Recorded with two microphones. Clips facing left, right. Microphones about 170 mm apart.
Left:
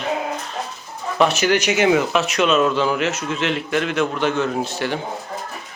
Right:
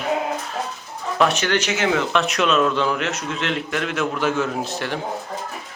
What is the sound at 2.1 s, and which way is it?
A man's voice, centre (ahead or behind).